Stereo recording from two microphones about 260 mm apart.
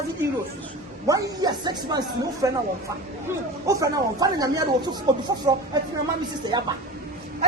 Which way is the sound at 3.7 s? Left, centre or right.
Centre.